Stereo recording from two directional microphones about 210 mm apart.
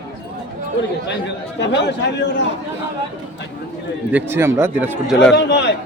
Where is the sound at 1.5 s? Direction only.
55° left (ahead or behind).